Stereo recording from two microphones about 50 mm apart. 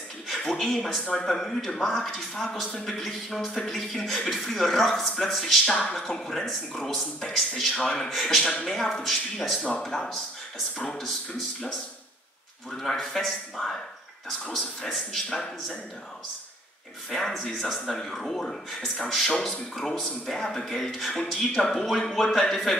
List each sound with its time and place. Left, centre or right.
0.4 s speech: centre
12.7 s speech: centre
14.9 s speech: centre
17.1 s speech: centre
19.2 s speech: centre